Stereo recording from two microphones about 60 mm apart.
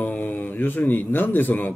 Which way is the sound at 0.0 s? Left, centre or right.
Left.